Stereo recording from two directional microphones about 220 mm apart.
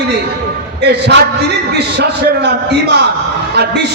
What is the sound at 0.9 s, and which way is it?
Speech, 50° right (ahead or behind).